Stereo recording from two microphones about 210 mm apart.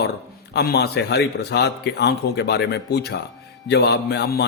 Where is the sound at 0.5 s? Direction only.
50° left (ahead or behind).